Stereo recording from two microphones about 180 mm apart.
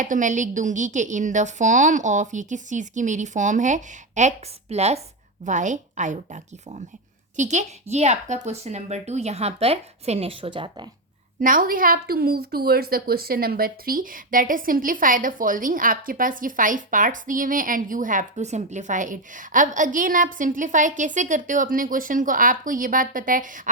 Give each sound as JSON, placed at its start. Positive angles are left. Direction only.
{"t": 0.0, "sound": "a woman's voice", "side_deg": -45}
{"t": 11.3, "sound": "a woman's voice", "side_deg": -50}